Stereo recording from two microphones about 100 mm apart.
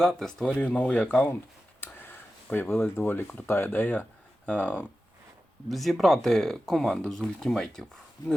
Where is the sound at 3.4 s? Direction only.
25° left (ahead or behind).